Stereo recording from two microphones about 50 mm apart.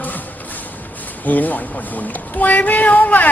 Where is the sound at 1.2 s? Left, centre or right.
Left.